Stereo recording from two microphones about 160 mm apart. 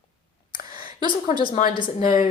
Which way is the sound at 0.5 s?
65° left (ahead or behind).